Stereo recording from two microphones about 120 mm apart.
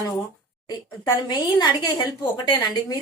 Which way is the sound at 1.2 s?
35° left (ahead or behind).